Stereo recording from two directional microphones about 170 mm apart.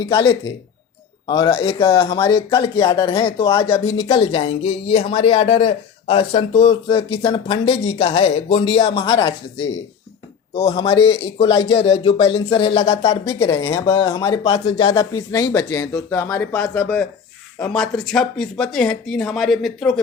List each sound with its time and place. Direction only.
0.0 s speech: 25° left (ahead or behind)
7.2 s speech: 20° left (ahead or behind)
7.4 s speech: 35° left (ahead or behind)
10.5 s speech: 35° left (ahead or behind); by 20.0 s centre (ahead or behind)